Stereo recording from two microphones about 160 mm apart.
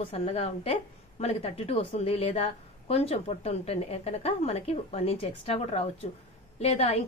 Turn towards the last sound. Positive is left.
turn(degrees=40)  # may be behind; listen again after turning